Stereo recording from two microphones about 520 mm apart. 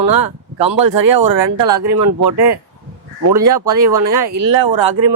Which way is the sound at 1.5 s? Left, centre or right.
Right.